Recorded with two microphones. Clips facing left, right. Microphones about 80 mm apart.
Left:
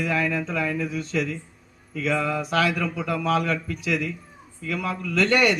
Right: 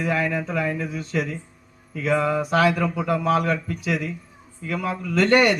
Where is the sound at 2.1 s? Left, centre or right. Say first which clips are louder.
Right 4 dB; centre.